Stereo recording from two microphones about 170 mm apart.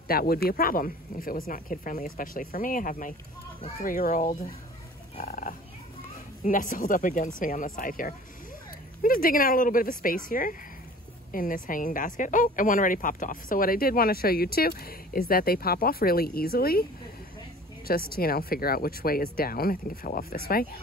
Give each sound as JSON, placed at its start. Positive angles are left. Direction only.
{"t": 0.1, "sound": "speech", "side_deg": 60}
{"t": 17.8, "sound": "speech", "side_deg": 60}